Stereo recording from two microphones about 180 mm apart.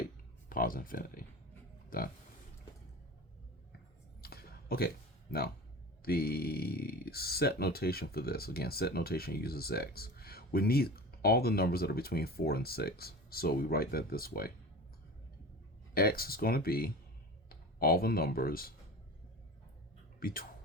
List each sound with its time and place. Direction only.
0.5 s speech: 50° left (ahead or behind)
4.2 s a sound: 60° left (ahead or behind)
6.0 s speech: 60° left (ahead or behind)
16.0 s speech: 55° left (ahead or behind)
20.1 s speech: 55° left (ahead or behind)